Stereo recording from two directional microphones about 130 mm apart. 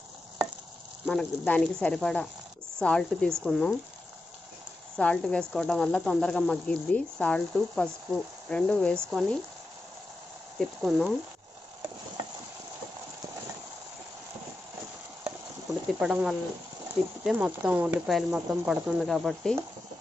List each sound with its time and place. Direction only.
1.0 s speech: 10° left (ahead or behind)
4.9 s speech: 5° left (ahead or behind)
10.6 s speech: centre (ahead or behind)
16.0 s speech: 5° right (ahead or behind)